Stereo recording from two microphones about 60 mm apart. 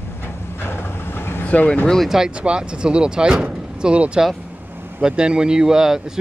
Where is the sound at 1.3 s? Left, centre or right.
Left.